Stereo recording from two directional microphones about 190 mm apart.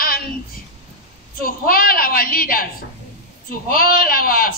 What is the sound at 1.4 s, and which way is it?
A man's voice, 50° left (ahead or behind).